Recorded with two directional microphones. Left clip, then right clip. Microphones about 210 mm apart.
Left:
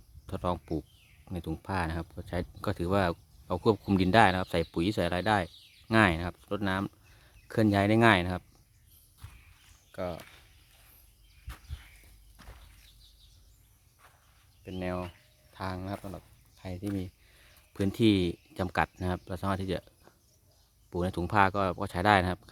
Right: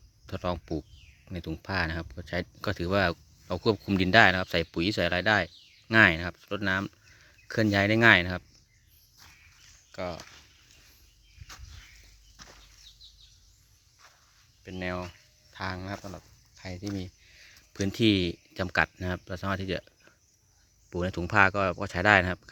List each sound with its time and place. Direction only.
0.3 s speech: 5° left (ahead or behind)
9.9 s speech: centre (ahead or behind)
12.4 s bird flight: 35° right (ahead or behind)
14.6 s speech: 5° left (ahead or behind)